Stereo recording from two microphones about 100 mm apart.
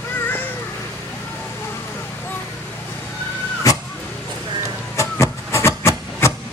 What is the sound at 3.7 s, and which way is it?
Vehicle, 35° left (ahead or behind).